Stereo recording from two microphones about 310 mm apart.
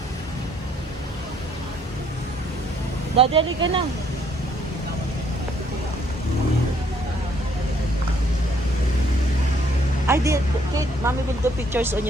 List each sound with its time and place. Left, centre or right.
3.2 s speech: centre
10.1 s speech: centre